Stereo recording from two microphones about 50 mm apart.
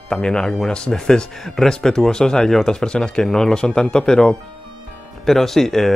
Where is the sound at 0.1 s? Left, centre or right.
Centre.